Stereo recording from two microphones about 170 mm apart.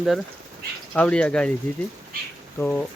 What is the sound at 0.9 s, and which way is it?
Speech, 5° left (ahead or behind).